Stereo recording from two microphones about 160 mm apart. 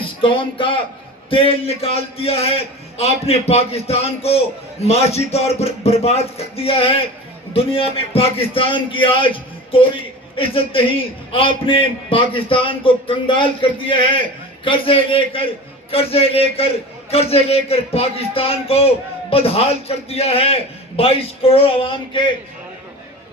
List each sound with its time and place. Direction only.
0.2 s a man's voice: 35° left (ahead or behind)